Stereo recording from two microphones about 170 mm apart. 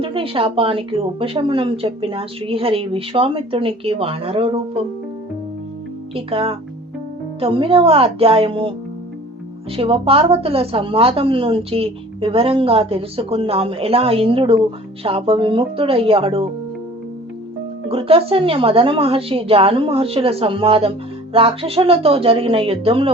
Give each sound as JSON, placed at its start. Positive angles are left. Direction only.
{"t": 0.0, "sound": "a woman's voice", "side_deg": -35}
{"t": 6.1, "sound": "a woman's voice", "side_deg": -35}
{"t": 9.7, "sound": "a woman's voice", "side_deg": -35}
{"t": 17.8, "sound": "a woman's voice", "side_deg": -35}